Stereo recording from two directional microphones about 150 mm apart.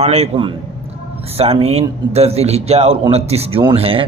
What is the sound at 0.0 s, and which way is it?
Speech, 45° right (ahead or behind).